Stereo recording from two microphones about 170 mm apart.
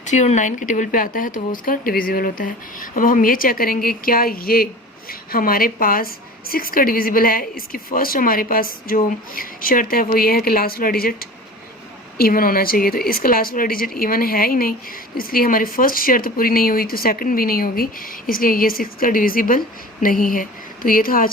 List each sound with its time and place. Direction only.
0.0 s speech: 45° left (ahead or behind)